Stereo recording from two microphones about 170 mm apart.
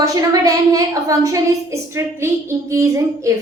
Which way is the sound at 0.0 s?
20° right (ahead or behind).